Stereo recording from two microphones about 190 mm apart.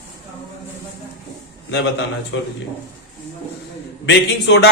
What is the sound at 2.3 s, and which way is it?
Speech, 75° left (ahead or behind).